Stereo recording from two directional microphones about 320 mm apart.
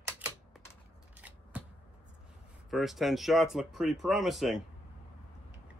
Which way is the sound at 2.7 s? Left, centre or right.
Centre.